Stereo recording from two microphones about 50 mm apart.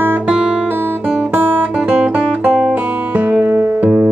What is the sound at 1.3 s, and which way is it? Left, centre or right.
Guitar, right.